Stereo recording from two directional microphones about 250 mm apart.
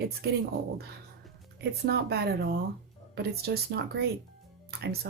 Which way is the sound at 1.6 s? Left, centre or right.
Right.